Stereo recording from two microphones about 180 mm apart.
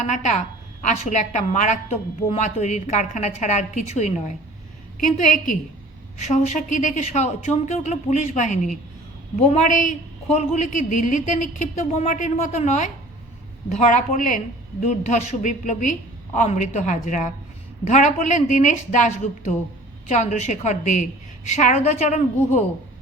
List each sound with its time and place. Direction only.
0.0 s a woman's voice: 40° left (ahead or behind)
6.1 s a woman's voice: 40° left (ahead or behind)